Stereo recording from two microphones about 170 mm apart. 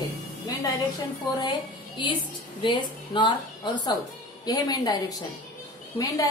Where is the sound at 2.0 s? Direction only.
30° left (ahead or behind).